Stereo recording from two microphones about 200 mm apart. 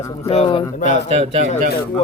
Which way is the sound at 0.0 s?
15° left (ahead or behind).